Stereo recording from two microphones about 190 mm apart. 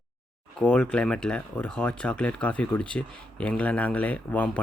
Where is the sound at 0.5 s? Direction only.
5° left (ahead or behind).